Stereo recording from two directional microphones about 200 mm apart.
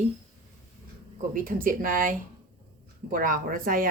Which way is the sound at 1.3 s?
40° right (ahead or behind).